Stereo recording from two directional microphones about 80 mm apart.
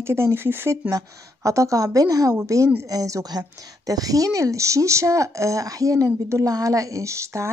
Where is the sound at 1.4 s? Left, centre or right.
Right.